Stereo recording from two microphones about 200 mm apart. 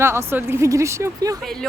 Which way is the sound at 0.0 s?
15° right (ahead or behind).